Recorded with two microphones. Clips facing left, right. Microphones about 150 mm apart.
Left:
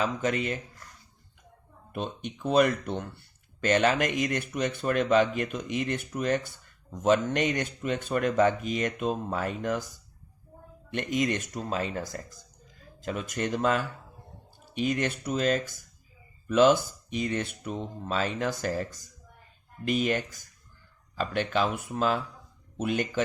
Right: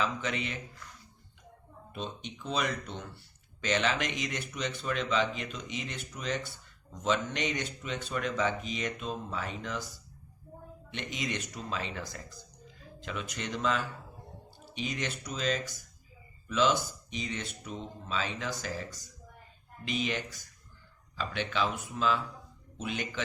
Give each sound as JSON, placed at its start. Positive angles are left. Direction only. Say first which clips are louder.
{"t": 0.0, "sound": "speech", "louder": "left 5 dB", "side_deg": 45}
{"t": 1.9, "sound": "speech", "louder": "left 5 dB", "side_deg": 55}